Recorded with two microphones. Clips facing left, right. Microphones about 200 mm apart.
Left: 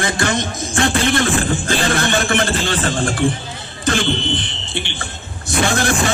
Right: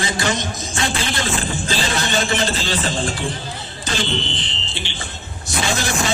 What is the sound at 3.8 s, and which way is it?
A man's voice, 55° left (ahead or behind).